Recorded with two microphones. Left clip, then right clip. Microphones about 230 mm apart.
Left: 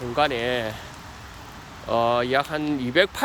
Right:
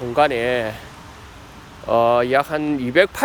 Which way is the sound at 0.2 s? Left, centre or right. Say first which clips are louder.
Right 5 dB; centre.